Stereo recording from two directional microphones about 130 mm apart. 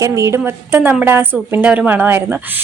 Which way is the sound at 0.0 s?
20° right (ahead or behind).